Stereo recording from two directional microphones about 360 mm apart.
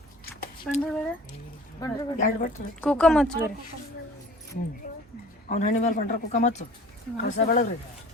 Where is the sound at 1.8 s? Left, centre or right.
Centre.